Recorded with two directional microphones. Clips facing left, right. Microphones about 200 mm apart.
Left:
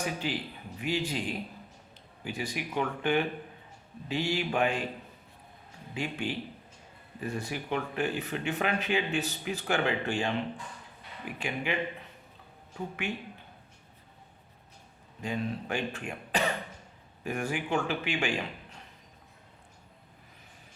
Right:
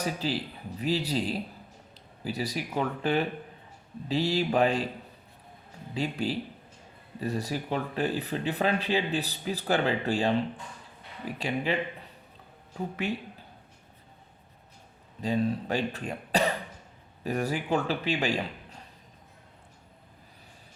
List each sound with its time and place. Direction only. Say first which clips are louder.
0.0 s speech: right 2 dB; 35° right (ahead or behind)
5.9 s speech: right 4 dB; 35° right (ahead or behind)
13.0 s speech: right 4 dB; 35° right (ahead or behind)
15.2 s speech: right 6 dB; 35° right (ahead or behind)